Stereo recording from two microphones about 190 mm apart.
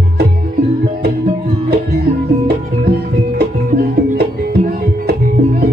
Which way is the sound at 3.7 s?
55° right (ahead or behind).